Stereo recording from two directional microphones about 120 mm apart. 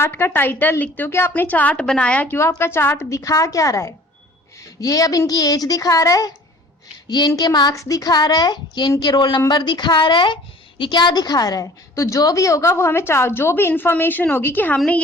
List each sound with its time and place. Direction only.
0.0 s a woman's voice: 20° left (ahead or behind)